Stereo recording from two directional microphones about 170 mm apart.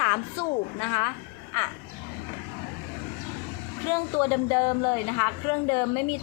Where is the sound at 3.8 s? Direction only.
15° left (ahead or behind).